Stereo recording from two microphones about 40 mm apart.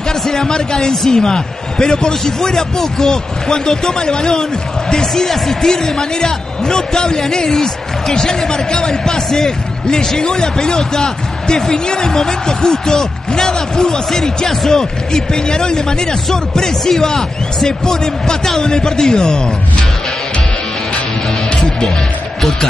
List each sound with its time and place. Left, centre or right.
0.1 s a man's voice: centre
21.6 s music: centre
22.4 s a man's voice: centre